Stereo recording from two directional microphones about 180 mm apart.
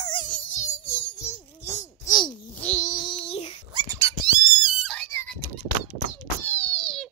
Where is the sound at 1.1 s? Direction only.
15° left (ahead or behind).